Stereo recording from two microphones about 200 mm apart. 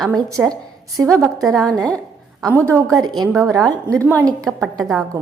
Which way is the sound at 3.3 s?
Centre (ahead or behind).